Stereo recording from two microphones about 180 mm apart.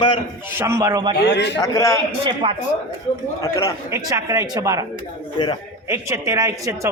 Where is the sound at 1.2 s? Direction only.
75° left (ahead or behind).